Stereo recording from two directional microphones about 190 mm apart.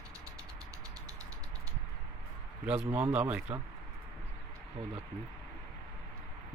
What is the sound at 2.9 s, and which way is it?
Speech, 10° right (ahead or behind).